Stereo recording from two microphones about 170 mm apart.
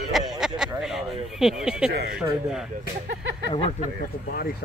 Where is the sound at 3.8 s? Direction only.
60° left (ahead or behind).